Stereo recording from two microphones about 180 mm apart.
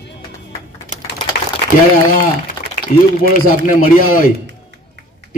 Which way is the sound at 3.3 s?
50° left (ahead or behind).